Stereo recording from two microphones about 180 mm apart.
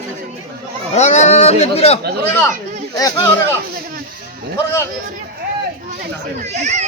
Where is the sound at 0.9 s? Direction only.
40° left (ahead or behind).